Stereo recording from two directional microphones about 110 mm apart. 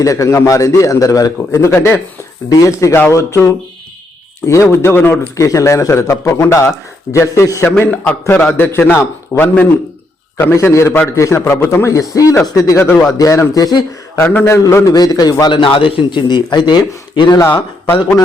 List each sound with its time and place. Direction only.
0.0 s a man's voice: 30° left (ahead or behind)
7.6 s a man's voice: 15° left (ahead or behind); by 17.4 s 40° left (ahead or behind)
17.4 s speech: 20° left (ahead or behind)